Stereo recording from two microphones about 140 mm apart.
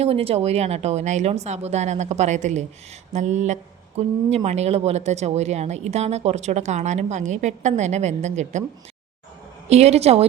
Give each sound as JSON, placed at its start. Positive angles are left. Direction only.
{"t": 0.0, "sound": "a woman's voice", "side_deg": -45}
{"t": 9.6, "sound": "a woman's voice", "side_deg": -50}